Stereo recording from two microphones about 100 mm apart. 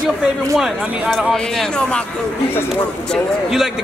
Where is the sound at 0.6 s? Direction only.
5° right (ahead or behind).